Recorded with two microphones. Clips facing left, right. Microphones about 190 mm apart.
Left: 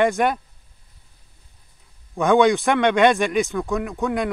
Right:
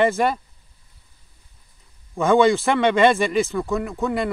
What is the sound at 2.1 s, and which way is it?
Speech, centre (ahead or behind).